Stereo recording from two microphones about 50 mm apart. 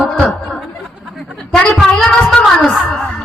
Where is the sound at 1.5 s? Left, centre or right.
Centre.